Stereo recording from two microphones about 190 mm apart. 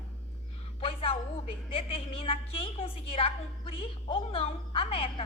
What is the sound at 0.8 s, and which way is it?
A woman's voice, 30° left (ahead or behind).